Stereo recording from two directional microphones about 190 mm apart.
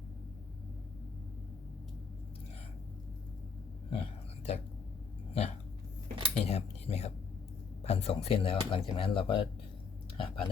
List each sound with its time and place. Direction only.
3.8 s a sound: 30° left (ahead or behind)
6.3 s cutlery: 35° left (ahead or behind)
7.9 s speech: 30° left (ahead or behind)
10.2 s whispering: 30° left (ahead or behind)